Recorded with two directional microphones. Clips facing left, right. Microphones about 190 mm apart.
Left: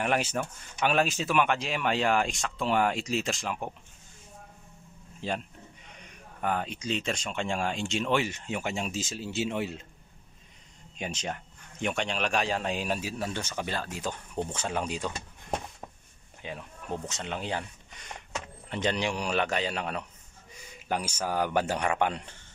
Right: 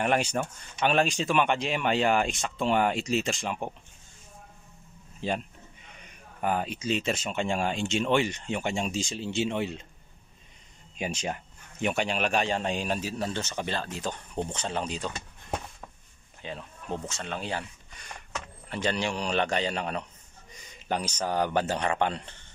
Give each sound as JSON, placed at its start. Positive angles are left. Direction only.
{"t": 0.0, "sound": "speech", "side_deg": 5}
{"t": 5.2, "sound": "speech", "side_deg": 0}
{"t": 6.4, "sound": "speech", "side_deg": -5}
{"t": 11.0, "sound": "speech", "side_deg": -10}
{"t": 16.4, "sound": "speech", "side_deg": 10}